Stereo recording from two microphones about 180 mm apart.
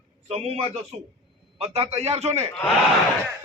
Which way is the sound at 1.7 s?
35° right (ahead or behind).